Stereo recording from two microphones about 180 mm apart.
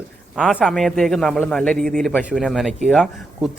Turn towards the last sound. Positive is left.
turn(degrees=0)  # may be behind; listen again after turning